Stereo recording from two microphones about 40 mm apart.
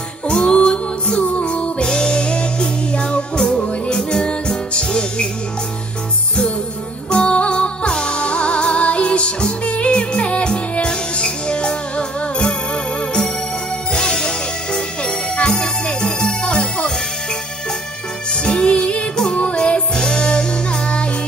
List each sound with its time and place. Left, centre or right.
0.3 s music: left
7.1 s music: left
13.9 s music: left
18.4 s music: left